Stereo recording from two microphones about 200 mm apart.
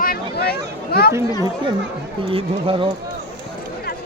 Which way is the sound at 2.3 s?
25° right (ahead or behind).